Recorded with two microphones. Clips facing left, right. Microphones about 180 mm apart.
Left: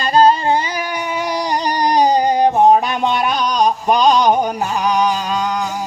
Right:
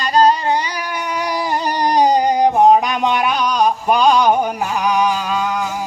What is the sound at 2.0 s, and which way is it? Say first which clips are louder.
Music: even; 10° right (ahead or behind).